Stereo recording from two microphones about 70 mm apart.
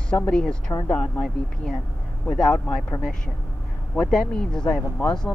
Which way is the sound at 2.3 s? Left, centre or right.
Centre.